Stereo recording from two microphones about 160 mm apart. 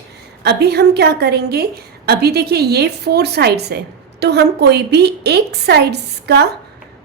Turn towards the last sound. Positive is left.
turn(degrees=-90)